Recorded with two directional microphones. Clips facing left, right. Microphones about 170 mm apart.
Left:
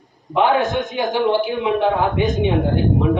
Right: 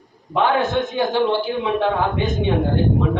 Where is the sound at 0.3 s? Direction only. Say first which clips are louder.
Left 1 dB; 15° left (ahead or behind).